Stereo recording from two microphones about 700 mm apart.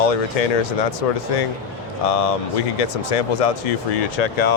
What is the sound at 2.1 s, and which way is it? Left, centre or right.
Speech, left.